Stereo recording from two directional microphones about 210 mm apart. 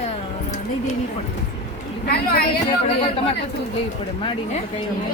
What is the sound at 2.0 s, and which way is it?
Speech, 50° left (ahead or behind).